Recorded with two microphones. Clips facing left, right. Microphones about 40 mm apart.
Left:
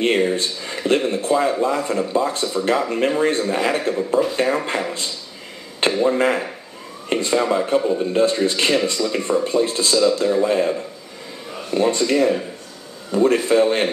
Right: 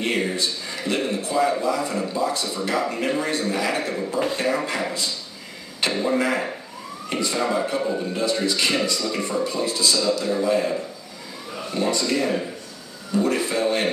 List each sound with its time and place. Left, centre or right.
0.0 s a man's voice: left
11.7 s a man's voice: left